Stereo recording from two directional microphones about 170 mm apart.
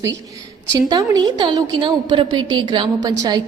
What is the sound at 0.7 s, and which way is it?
A woman's voice, 25° right (ahead or behind).